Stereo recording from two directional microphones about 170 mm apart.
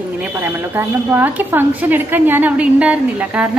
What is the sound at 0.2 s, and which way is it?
A woman's voice, 10° right (ahead or behind).